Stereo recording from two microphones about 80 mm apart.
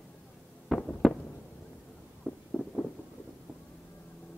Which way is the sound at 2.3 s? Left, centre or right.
Centre.